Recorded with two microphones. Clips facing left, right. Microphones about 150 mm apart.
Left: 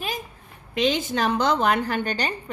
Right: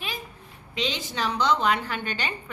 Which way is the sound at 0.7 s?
50° left (ahead or behind).